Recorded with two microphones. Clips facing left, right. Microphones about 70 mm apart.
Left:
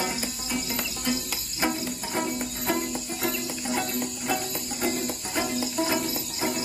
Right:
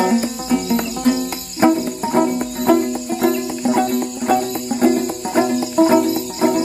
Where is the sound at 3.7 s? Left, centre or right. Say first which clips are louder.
Right 12 dB; right.